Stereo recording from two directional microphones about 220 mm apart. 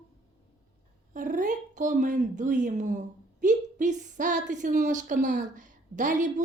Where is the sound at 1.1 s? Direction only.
35° right (ahead or behind).